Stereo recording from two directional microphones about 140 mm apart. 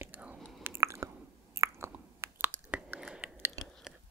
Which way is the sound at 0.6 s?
20° right (ahead or behind).